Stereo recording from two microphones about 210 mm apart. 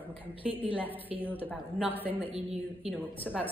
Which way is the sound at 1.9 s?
10° left (ahead or behind).